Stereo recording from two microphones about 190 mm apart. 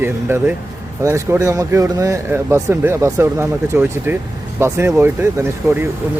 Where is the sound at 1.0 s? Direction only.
15° right (ahead or behind).